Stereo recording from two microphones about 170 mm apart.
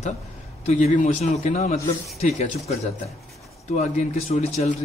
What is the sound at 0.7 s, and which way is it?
A man's voice, 45° left (ahead or behind).